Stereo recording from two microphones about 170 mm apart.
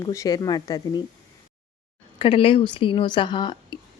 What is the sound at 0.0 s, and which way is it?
Speech, 20° left (ahead or behind).